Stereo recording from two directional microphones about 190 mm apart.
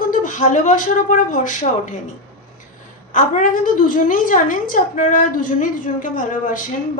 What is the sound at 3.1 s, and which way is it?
Speech, 40° left (ahead or behind).